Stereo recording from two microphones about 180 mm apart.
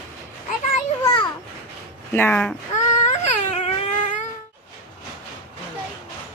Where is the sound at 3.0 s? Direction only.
40° left (ahead or behind).